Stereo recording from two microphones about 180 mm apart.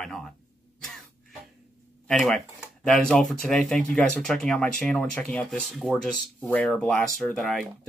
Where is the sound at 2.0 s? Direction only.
5° left (ahead or behind).